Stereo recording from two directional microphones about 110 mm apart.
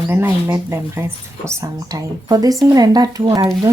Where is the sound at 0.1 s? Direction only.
20° right (ahead or behind).